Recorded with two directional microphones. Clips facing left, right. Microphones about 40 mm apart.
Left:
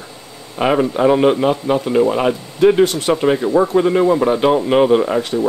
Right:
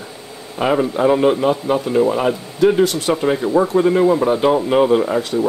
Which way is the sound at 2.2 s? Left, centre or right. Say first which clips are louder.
Left 1 dB; left.